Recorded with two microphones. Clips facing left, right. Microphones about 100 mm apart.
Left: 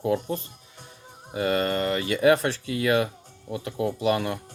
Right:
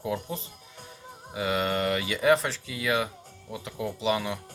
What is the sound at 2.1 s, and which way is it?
Speech, 60° left (ahead or behind).